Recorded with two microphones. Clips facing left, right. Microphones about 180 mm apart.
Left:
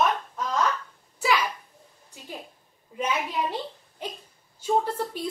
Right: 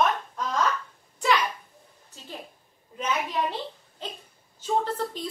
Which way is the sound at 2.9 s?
10° left (ahead or behind).